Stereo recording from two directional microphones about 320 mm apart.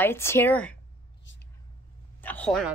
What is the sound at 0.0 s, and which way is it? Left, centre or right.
Speech, centre.